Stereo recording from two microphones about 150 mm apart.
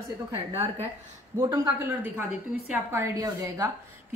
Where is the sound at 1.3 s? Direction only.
20° right (ahead or behind).